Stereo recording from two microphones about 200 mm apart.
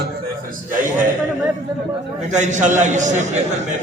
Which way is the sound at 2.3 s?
35° right (ahead or behind).